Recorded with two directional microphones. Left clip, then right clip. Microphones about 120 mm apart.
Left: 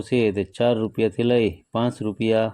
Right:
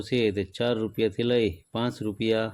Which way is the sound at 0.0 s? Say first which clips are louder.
Left 4 dB; 30° left (ahead or behind).